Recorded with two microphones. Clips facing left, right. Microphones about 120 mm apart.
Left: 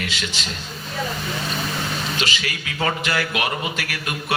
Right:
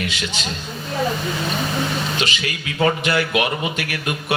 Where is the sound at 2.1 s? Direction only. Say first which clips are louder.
Right 2 dB; 25° right (ahead or behind).